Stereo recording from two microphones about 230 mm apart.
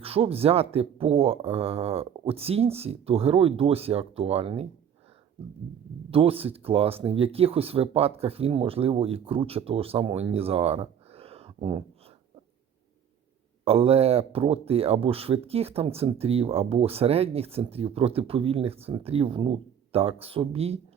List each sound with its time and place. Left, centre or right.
0.0 s speech: right
6.1 s speech: right
13.7 s speech: right